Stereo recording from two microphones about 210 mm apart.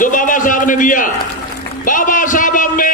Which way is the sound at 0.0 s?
40° left (ahead or behind).